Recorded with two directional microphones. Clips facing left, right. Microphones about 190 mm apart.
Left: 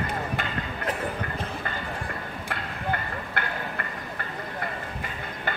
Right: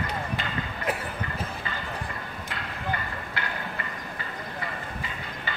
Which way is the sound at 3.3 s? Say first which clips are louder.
Left 3 dB; 55° left (ahead or behind).